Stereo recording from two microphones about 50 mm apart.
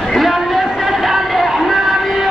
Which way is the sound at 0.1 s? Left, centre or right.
Centre.